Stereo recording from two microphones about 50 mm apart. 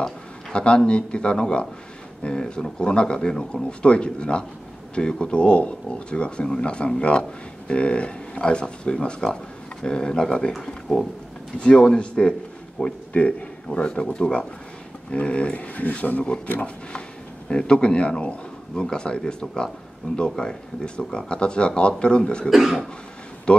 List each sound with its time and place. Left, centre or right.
0.0 s speech: centre
13.1 s speech: left
13.7 s speech: centre
17.5 s speech: centre
22.5 s cough: centre